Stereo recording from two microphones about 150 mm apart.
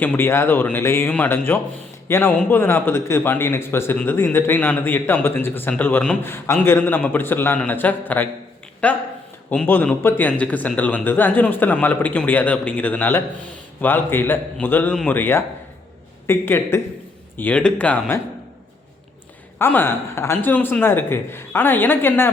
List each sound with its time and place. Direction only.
0.0 s a man's voice: 15° left (ahead or behind)
19.5 s a man's voice: 15° left (ahead or behind)